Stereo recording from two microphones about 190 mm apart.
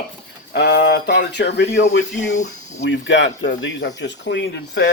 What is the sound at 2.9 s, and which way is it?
Speech, 80° left.